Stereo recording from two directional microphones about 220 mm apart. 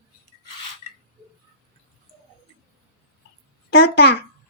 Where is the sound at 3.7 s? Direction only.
50° left (ahead or behind).